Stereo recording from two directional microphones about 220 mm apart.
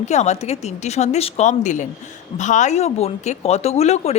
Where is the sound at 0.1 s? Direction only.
30° left (ahead or behind).